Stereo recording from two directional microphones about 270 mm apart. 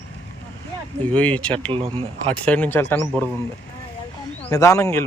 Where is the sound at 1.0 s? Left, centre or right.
Centre.